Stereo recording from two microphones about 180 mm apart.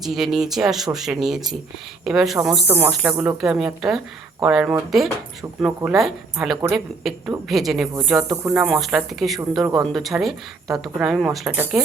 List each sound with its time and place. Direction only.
0.0 s speech: centre (ahead or behind)
9.6 s speech: 20° right (ahead or behind)
9.9 s speech: centre (ahead or behind)